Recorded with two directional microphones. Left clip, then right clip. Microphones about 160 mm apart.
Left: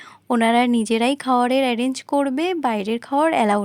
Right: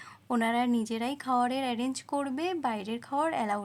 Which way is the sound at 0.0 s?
40° left (ahead or behind).